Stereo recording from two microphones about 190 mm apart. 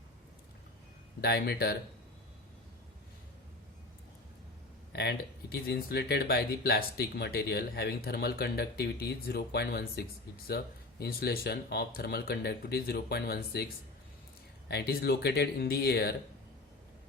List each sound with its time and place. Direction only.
1.2 s speech: 55° left (ahead or behind)
4.9 s speech: 60° left (ahead or behind)
14.7 s speech: 60° left (ahead or behind)